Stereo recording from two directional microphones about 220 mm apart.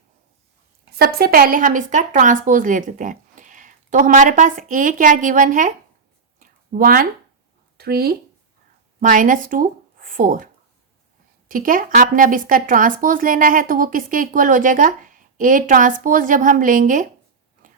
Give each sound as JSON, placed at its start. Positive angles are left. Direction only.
{"t": 0.9, "sound": "speech", "side_deg": -45}
{"t": 6.4, "sound": "a sound", "side_deg": -40}
{"t": 7.8, "sound": "speech", "side_deg": -45}